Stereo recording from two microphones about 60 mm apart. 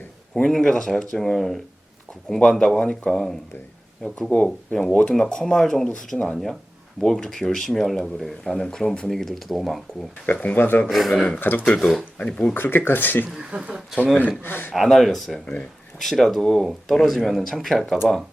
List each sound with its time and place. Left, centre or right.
0.3 s speech: centre
10.3 s speech: left
10.8 s speech: centre
11.1 s speech: centre
11.3 s speech: left
12.2 s speech: centre
12.5 s speech: left
13.3 s speech: centre
14.2 s speech: left
14.8 s speech: centre